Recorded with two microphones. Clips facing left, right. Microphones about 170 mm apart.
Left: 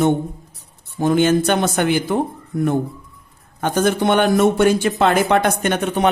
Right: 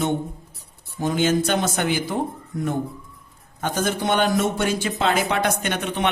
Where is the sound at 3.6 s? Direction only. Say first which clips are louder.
Left 6 dB; 55° left (ahead or behind).